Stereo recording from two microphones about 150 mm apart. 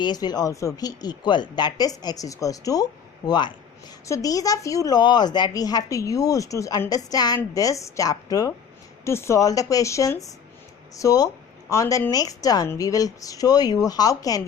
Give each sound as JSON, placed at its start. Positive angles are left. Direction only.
{"t": 0.0, "sound": "speech", "side_deg": 30}